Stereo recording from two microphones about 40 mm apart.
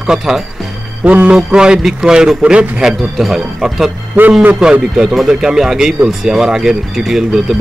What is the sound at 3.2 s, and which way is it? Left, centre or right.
Speech, centre.